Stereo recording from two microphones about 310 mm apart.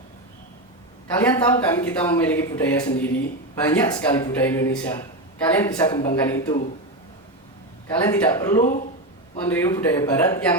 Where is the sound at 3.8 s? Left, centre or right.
Centre.